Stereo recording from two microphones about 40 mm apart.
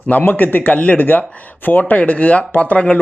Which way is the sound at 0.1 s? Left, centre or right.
Left.